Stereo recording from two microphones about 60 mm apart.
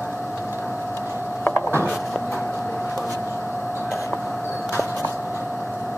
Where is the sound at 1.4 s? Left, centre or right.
Left.